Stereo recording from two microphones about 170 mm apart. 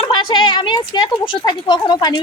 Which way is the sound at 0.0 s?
30° left (ahead or behind).